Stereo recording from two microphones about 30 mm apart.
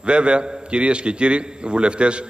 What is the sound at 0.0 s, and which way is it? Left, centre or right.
A man's voice, right.